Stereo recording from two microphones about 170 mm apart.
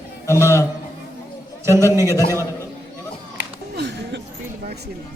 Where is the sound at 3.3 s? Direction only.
90° right.